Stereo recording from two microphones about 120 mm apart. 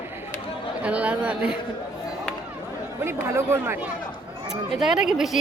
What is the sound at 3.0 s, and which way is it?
Speech, 20° right (ahead or behind).